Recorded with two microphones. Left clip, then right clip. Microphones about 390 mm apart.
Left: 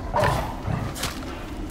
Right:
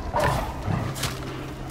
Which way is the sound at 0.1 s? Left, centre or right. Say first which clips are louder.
Left 1 dB; centre.